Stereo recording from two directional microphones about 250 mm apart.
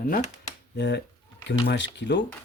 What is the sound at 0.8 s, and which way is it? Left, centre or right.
Speech, left.